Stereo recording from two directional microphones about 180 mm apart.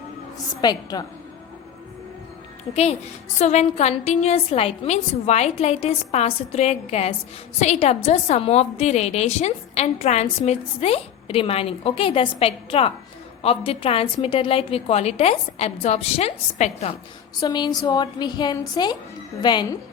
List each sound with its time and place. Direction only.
0.3 s a woman's voice: 20° left (ahead or behind)
2.7 s a woman's voice: 35° left (ahead or behind)
17.4 s a woman's voice: 25° left (ahead or behind)